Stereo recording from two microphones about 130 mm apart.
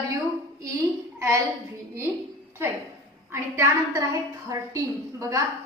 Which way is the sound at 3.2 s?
20° right (ahead or behind).